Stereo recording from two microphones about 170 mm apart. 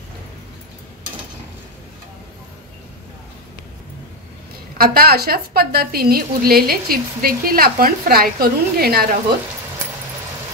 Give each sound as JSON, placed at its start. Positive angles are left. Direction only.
{"t": 4.7, "sound": "a woman's voice", "side_deg": -60}